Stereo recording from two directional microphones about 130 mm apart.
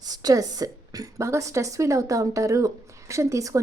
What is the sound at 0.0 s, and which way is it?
A woman's voice, 30° right (ahead or behind).